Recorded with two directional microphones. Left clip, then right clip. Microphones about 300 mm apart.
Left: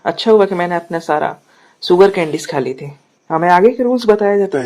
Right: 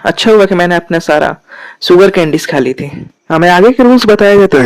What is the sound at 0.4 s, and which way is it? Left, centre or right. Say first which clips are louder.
Speech: right 7 dB; right.